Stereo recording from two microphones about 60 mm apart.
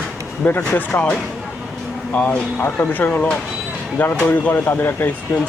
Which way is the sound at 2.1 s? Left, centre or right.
Left.